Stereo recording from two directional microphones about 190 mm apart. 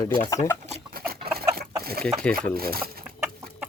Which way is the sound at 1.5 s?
55° right (ahead or behind).